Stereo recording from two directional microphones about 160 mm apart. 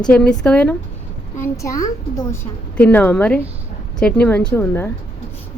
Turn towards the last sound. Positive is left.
turn(degrees=15)  # may be behind; listen again after turning